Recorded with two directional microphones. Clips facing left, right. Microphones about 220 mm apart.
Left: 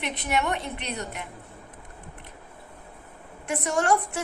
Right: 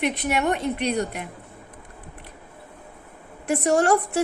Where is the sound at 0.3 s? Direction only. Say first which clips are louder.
Right 1 dB; 45° right (ahead or behind).